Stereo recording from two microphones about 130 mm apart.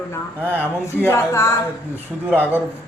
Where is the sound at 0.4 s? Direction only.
15° right (ahead or behind).